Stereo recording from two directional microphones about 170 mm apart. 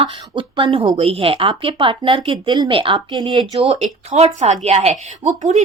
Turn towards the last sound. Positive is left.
turn(degrees=-40)  # may be behind; listen again after turning